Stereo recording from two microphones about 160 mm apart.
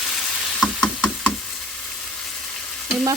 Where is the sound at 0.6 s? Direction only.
5° left (ahead or behind).